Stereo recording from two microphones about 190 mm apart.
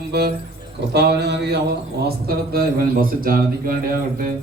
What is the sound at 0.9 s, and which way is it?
A man's voice, 60° right (ahead or behind).